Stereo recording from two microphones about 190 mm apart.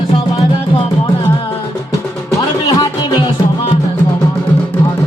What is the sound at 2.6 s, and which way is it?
Music, 20° left (ahead or behind).